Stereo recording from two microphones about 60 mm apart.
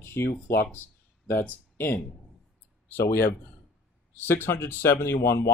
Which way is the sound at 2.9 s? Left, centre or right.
Left.